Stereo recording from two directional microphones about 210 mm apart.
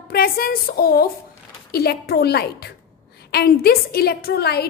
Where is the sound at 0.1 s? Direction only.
45° left (ahead or behind).